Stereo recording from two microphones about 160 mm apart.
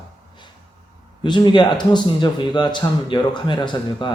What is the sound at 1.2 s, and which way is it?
A man's voice, 30° left (ahead or behind).